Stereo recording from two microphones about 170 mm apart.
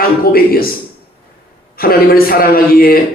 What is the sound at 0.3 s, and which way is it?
Speech, 60° left (ahead or behind).